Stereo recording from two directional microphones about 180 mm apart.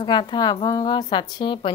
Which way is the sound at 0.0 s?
25° left (ahead or behind).